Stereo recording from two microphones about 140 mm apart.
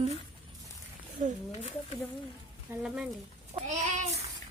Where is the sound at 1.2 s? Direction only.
70° right (ahead or behind).